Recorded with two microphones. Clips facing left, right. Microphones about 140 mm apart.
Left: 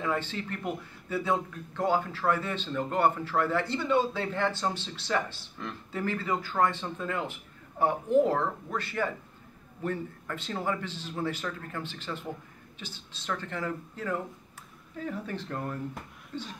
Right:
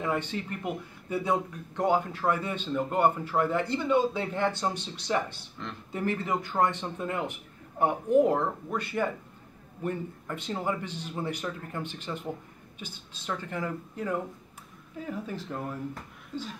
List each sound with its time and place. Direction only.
0.0 s speech: 15° right (ahead or behind)